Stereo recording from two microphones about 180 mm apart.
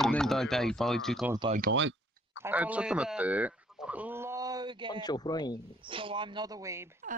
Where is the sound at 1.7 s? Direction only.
70° right (ahead or behind).